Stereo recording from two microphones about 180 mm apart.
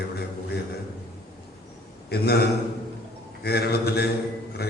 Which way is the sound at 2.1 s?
60° left (ahead or behind).